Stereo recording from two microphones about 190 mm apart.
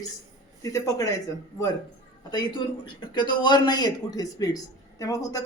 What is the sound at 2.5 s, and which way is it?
A man's voice, 25° left (ahead or behind).